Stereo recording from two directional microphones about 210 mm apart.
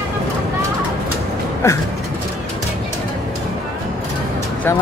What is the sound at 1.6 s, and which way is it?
Speech, 10° left (ahead or behind).